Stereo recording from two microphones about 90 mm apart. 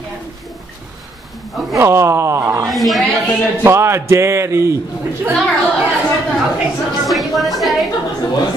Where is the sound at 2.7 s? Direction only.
Centre (ahead or behind).